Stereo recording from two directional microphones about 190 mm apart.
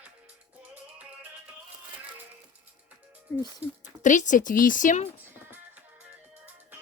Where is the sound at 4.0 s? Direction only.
40° left (ahead or behind).